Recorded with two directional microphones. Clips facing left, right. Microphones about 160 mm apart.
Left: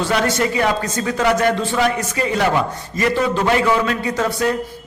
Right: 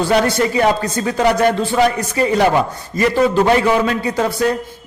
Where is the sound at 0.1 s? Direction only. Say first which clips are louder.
Right 4 dB; 35° right (ahead or behind).